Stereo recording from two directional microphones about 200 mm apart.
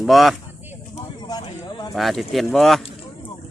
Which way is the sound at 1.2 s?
20° left (ahead or behind).